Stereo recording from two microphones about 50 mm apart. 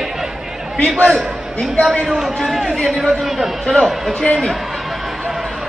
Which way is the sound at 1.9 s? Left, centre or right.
Centre.